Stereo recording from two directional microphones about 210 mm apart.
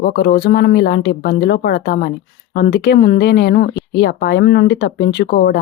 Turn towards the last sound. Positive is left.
turn(degrees=45)  # may be behind; listen again after turning